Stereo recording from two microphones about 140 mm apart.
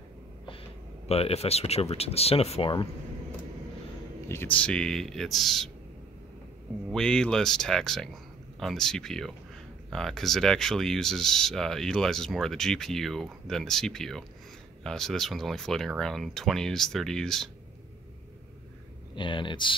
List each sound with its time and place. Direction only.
1.0 s speech: 45° left (ahead or behind)
4.3 s speech: 15° left (ahead or behind)
6.9 s speech: 5° left (ahead or behind)
19.1 s speech: 35° left (ahead or behind)